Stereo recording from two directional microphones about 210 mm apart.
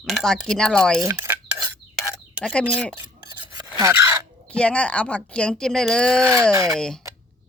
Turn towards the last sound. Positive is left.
turn(degrees=0)  # may be behind; listen again after turning